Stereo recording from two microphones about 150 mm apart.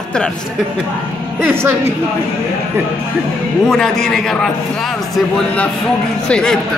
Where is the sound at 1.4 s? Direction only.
15° right (ahead or behind).